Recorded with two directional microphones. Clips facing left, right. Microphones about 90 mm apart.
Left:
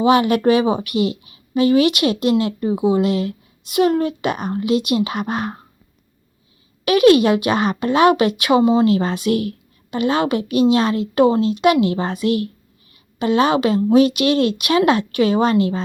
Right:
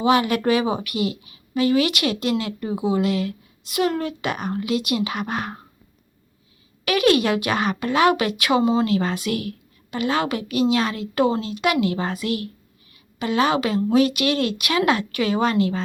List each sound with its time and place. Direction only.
0.0 s speech: 25° left (ahead or behind)
6.8 s speech: 25° left (ahead or behind)